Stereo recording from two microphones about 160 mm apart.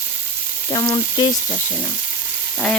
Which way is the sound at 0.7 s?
25° left (ahead or behind).